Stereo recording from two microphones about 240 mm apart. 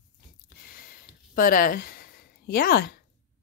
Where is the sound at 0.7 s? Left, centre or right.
Left.